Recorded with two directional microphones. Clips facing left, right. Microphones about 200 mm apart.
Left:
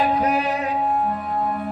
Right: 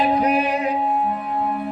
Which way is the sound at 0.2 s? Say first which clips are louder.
Right 2 dB; 15° right (ahead or behind).